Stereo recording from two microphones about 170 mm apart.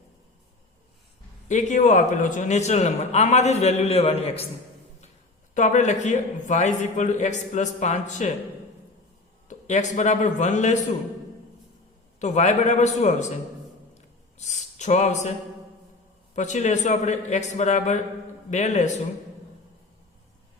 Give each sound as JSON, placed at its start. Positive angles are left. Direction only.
{"t": 1.5, "sound": "a man's voice", "side_deg": 45}
{"t": 5.5, "sound": "a man's voice", "side_deg": 45}
{"t": 9.5, "sound": "a man's voice", "side_deg": 45}
{"t": 12.2, "sound": "a man's voice", "side_deg": 45}
{"t": 14.3, "sound": "speech", "side_deg": 45}
{"t": 16.3, "sound": "a man's voice", "side_deg": 45}